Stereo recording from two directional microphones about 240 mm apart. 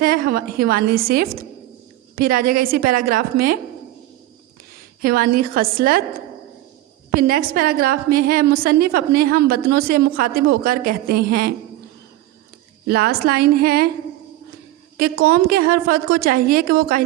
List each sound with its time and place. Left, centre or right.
0.0 s a woman's voice: right
5.0 s a woman's voice: right
7.1 s a woman's voice: right
12.9 s a woman's voice: right
14.9 s a woman's voice: right